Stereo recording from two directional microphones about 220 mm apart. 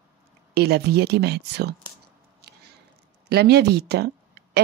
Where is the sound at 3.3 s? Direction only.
50° right (ahead or behind).